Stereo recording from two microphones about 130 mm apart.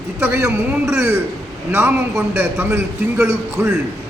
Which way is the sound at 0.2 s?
20° right (ahead or behind).